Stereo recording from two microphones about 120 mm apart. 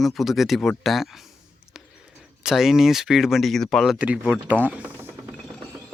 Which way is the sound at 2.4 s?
5° right (ahead or behind).